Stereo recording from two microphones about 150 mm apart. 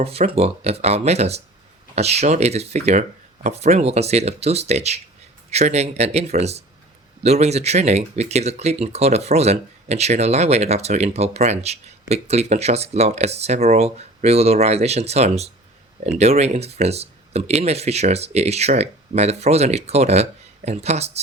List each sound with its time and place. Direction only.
0.0 s speech: 40° right (ahead or behind)